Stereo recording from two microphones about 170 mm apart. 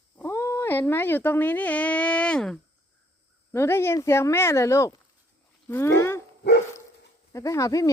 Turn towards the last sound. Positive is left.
turn(degrees=20)  # may be behind; listen again after turning